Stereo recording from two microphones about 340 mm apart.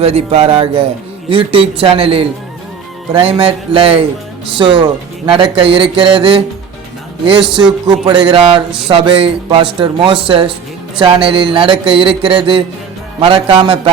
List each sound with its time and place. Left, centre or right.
0.0 s speech: centre
7.9 s speech: centre